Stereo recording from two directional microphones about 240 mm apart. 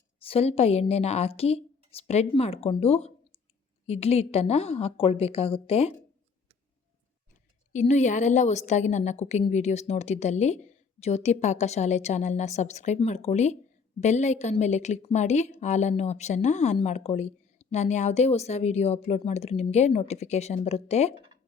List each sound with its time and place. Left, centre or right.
0.2 s a woman's voice: left
7.7 s a woman's voice: left